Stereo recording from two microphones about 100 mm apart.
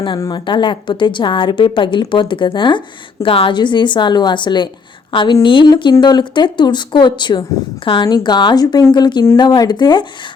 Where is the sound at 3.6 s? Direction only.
50° left (ahead or behind).